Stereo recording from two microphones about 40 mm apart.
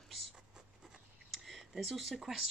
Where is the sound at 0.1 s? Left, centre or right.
Centre.